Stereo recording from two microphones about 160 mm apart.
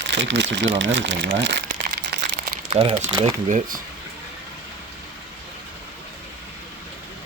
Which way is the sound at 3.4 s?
50° right (ahead or behind).